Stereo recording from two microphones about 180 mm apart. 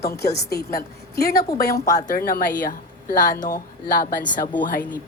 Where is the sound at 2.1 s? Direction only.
55° left (ahead or behind).